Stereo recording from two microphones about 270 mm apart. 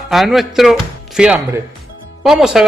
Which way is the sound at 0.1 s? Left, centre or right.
Centre.